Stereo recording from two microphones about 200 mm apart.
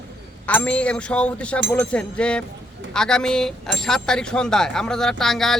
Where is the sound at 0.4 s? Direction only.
5° left (ahead or behind).